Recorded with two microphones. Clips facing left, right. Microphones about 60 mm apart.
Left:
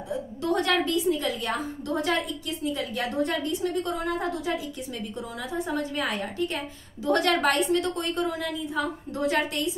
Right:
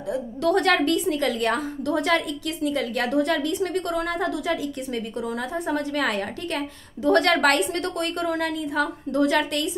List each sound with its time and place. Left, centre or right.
0.1 s a woman's voice: right
7.1 s a woman's voice: right